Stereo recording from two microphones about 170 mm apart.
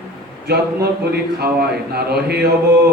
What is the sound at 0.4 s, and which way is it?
Speech, 70° right (ahead or behind).